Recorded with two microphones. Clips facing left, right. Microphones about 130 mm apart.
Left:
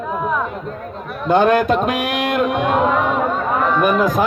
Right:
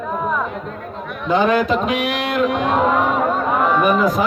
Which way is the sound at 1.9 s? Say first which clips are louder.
Even; 50° left (ahead or behind).